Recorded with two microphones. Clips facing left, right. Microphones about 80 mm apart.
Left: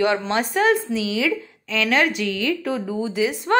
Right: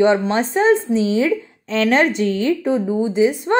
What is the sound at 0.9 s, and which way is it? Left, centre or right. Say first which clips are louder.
Speech: right 6 dB; right.